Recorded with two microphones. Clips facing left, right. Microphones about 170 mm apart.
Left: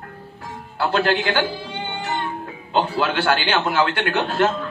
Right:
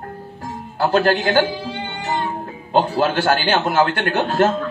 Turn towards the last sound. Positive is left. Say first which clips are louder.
# right 2 dB
turn(degrees=-40)  # may be behind; listen again after turning